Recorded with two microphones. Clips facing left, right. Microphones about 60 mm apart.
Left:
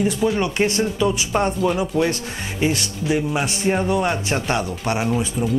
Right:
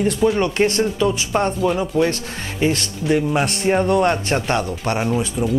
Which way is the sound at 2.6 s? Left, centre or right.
Centre.